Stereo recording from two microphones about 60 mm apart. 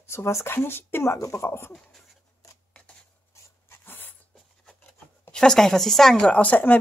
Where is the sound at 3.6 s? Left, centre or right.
Left.